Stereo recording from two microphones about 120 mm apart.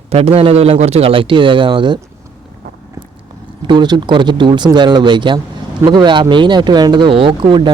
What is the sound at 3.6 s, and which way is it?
Speech, 40° right (ahead or behind).